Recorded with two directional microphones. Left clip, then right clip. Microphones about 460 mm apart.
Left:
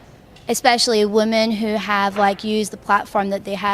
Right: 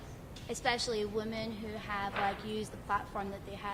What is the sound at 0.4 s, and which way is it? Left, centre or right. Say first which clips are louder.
A woman's voice: left 18 dB; left.